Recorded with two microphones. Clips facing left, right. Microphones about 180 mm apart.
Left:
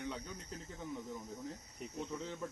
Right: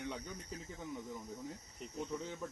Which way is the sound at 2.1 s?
Centre (ahead or behind).